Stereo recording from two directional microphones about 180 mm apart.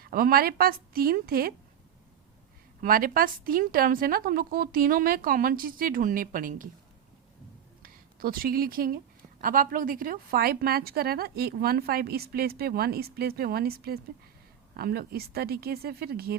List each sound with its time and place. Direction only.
0.0 s a woman's voice: 55° right (ahead or behind)
2.8 s a woman's voice: 50° right (ahead or behind)
7.8 s a woman's voice: 55° right (ahead or behind)